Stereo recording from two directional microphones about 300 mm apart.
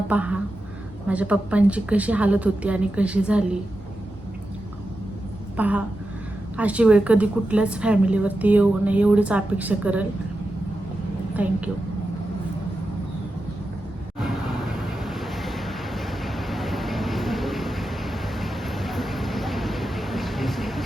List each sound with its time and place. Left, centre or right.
0.1 s a woman's voice: centre
5.5 s a woman's voice: centre
11.4 s a woman's voice: centre
14.3 s vehicle: centre